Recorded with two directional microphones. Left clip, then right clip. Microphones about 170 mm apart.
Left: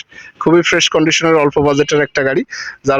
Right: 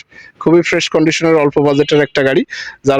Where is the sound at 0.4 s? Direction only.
15° right (ahead or behind).